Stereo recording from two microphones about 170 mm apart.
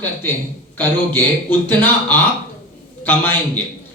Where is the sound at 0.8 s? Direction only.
10° left (ahead or behind).